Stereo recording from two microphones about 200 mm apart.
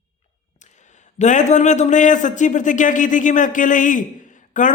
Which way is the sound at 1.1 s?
35° left (ahead or behind).